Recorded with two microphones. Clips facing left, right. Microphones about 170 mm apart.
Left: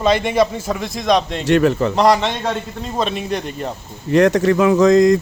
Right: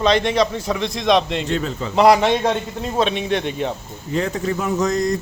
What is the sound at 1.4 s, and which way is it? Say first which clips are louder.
Speech: left 9 dB; 70° left (ahead or behind).